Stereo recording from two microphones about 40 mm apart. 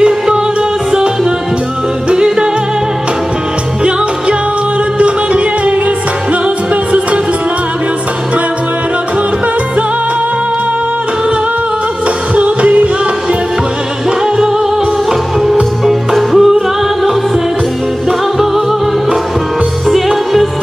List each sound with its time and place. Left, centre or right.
2.0 s music: centre
4.9 s music: right
12.4 s music: right
14.2 s music: centre
15.8 s music: centre
19.9 s music: centre